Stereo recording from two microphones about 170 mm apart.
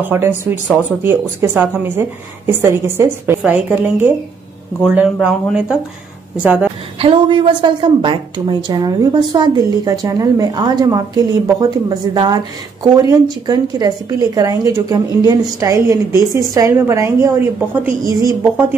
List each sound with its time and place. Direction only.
0.0 s speech: 10° right (ahead or behind)
7.0 s a woman's voice: 30° right (ahead or behind); by 18.8 s 15° right (ahead or behind)